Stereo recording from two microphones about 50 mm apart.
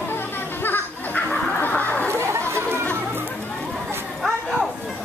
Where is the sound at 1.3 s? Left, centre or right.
Left.